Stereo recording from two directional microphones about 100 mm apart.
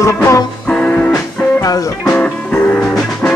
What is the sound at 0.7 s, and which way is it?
Music, 10° left (ahead or behind).